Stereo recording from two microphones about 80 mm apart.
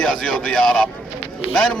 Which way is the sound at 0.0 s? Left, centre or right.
Centre.